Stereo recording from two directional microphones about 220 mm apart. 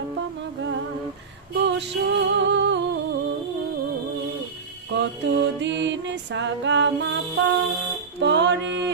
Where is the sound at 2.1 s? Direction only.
55° right (ahead or behind).